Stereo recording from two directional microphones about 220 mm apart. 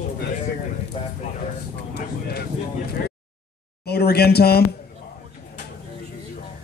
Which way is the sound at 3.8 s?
45° left (ahead or behind).